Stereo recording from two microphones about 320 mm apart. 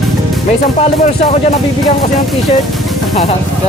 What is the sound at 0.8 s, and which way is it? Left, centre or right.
Speech, left.